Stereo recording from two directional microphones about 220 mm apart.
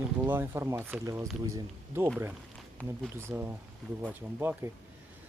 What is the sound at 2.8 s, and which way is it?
Speech, 5° left (ahead or behind).